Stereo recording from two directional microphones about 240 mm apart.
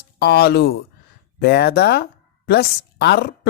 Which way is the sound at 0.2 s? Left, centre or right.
Left.